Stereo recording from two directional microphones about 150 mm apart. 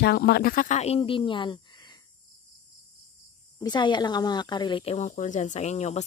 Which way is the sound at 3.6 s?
30° left (ahead or behind).